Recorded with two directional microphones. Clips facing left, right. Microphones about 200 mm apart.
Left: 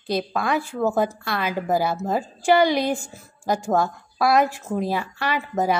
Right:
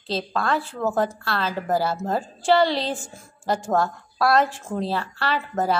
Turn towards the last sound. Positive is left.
turn(degrees=15)  # may be behind; listen again after turning